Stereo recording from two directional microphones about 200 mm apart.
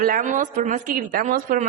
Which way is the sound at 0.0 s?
45° right (ahead or behind).